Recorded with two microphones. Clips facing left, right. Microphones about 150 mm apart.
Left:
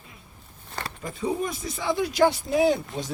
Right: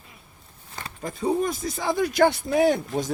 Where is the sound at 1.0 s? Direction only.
40° right (ahead or behind).